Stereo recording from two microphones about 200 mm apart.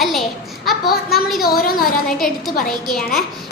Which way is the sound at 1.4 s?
50° left (ahead or behind).